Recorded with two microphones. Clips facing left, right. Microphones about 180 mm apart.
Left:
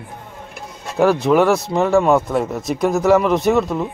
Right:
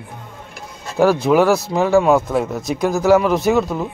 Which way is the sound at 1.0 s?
5° right (ahead or behind).